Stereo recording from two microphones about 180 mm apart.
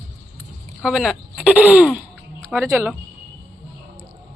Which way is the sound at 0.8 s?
Centre (ahead or behind).